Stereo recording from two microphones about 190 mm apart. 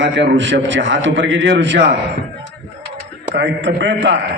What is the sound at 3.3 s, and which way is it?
Speech, 70° right (ahead or behind).